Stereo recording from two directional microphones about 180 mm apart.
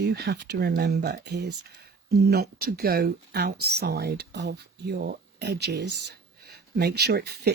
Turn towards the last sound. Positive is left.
turn(degrees=-65)  # may be behind; listen again after turning